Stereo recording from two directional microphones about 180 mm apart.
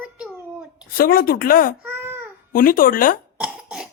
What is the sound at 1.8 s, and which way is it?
Babbling, 10° right (ahead or behind).